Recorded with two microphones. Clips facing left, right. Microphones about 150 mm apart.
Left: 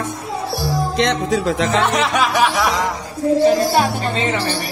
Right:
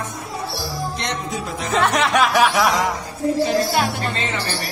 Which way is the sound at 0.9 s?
90° left.